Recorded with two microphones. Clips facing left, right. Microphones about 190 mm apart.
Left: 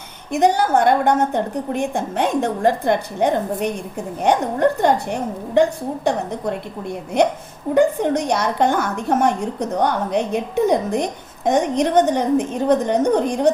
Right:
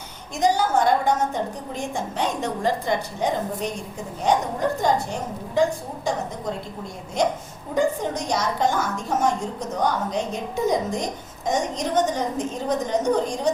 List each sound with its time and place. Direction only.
0.3 s a woman's voice: 60° left (ahead or behind)